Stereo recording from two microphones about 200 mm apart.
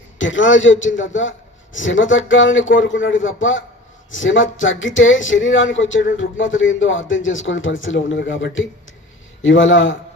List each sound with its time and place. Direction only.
0.2 s speech: 70° left (ahead or behind)